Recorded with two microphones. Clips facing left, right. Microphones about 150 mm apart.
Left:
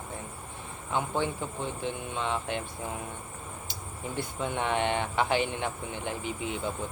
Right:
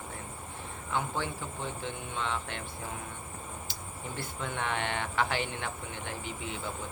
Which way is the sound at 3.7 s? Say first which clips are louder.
Left 3 dB; 15° left (ahead or behind).